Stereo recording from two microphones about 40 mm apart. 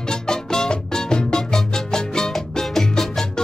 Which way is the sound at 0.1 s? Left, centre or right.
Centre.